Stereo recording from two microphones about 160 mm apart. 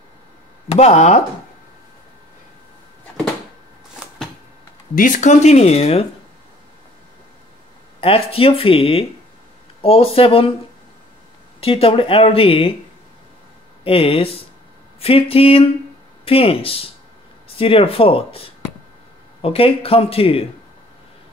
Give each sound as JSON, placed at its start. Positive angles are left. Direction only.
{"t": 0.7, "sound": "speech", "side_deg": 40}
{"t": 4.9, "sound": "speech", "side_deg": 55}
{"t": 8.0, "sound": "speech", "side_deg": 35}
{"t": 11.6, "sound": "speech", "side_deg": 35}
{"t": 13.8, "sound": "speech", "side_deg": 35}